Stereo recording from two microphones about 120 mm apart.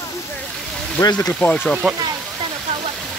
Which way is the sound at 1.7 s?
10° right (ahead or behind).